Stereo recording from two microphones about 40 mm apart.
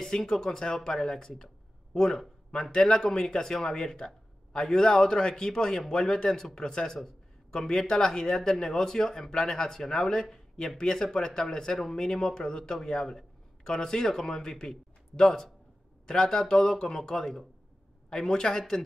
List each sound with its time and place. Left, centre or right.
0.0 s speech: centre
2.5 s speech: centre